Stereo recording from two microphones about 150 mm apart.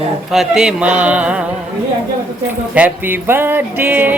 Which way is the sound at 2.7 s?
10° right (ahead or behind).